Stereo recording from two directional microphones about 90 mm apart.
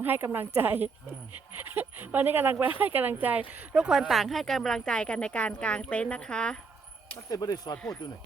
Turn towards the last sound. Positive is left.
turn(degrees=10)  # may be behind; listen again after turning